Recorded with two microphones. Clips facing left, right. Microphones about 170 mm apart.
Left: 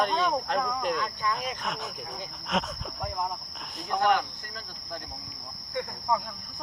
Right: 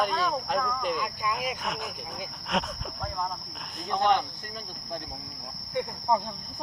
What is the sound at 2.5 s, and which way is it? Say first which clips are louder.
Speech: even; centre (ahead or behind).